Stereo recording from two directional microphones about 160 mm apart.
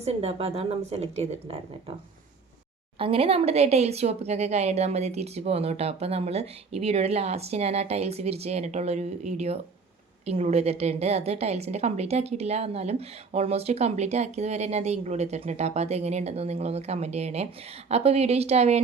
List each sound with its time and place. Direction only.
0.0 s a woman's voice: 40° right (ahead or behind)
3.0 s a woman's voice: 35° right (ahead or behind)